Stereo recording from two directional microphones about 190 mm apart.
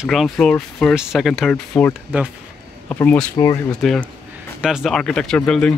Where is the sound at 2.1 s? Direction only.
10° right (ahead or behind).